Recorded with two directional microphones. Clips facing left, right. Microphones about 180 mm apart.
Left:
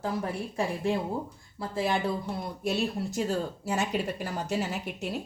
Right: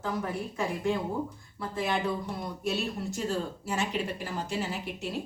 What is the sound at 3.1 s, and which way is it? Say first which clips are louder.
Speech: left 2 dB; 40° left (ahead or behind).